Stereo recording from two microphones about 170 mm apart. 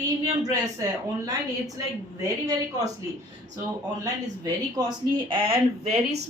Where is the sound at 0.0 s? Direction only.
20° right (ahead or behind).